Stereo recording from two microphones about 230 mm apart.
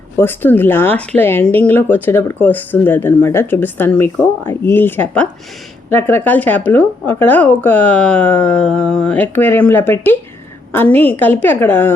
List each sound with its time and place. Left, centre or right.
0.2 s speech: centre